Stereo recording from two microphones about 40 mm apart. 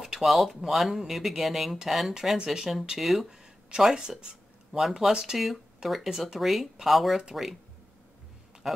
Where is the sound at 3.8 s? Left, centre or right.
Centre.